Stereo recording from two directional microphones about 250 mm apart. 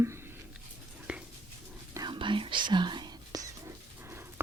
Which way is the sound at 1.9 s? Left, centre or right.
Centre.